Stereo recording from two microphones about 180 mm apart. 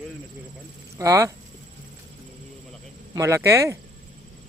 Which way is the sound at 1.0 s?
15° right (ahead or behind).